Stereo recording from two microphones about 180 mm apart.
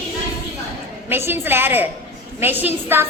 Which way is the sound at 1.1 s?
15° right (ahead or behind).